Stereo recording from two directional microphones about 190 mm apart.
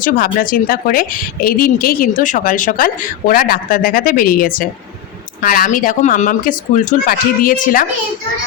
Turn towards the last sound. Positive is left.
turn(degrees=45)  # may be behind; listen again after turning